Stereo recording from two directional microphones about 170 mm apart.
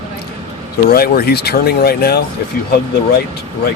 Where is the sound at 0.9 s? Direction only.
65° left (ahead or behind).